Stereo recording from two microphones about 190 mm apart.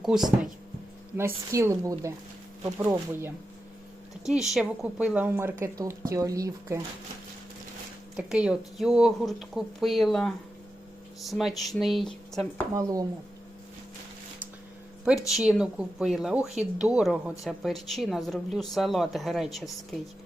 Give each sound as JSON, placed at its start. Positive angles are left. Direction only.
{"t": 0.0, "sound": "speech", "side_deg": 0}
{"t": 1.1, "sound": "a woman's voice", "side_deg": -15}
{"t": 4.3, "sound": "a woman's voice", "side_deg": 0}
{"t": 8.1, "sound": "speech", "side_deg": -5}
{"t": 12.7, "sound": "speech", "side_deg": -20}
{"t": 15.3, "sound": "speech", "side_deg": 0}